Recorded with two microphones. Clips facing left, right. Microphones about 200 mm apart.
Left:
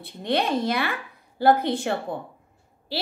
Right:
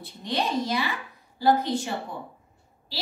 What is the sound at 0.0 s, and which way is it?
A woman's voice, 60° left (ahead or behind).